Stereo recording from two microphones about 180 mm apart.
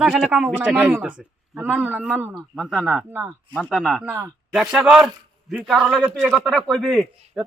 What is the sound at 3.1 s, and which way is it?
Speech, 15° right (ahead or behind).